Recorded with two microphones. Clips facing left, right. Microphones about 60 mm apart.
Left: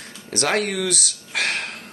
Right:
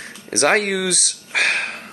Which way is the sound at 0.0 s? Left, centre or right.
Right.